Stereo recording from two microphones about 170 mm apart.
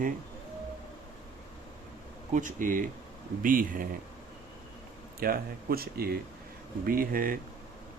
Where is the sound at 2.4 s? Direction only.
50° right (ahead or behind).